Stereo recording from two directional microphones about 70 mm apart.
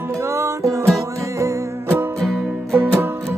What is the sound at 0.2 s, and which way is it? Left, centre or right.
Music, right.